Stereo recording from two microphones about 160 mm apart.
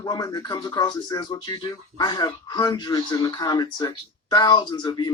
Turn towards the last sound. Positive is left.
turn(degrees=25)  # may be behind; listen again after turning